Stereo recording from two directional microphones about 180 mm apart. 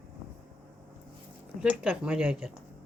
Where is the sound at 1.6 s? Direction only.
5° right (ahead or behind).